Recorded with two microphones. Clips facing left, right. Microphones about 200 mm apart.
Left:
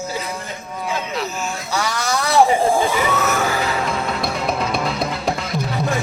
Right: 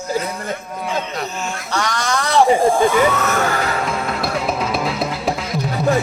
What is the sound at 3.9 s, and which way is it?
Music, centre (ahead or behind).